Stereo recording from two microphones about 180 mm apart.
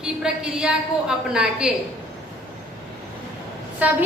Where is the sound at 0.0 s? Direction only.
5° right (ahead or behind).